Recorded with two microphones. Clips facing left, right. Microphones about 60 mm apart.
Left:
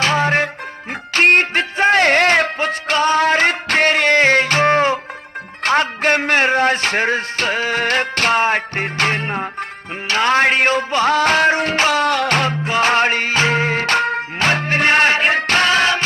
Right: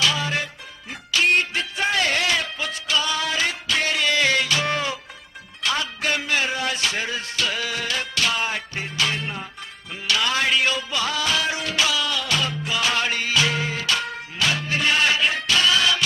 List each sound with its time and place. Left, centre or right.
0.0 s music: left